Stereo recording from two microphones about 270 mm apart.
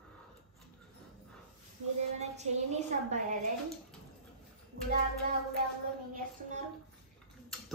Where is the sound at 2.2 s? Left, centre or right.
Right.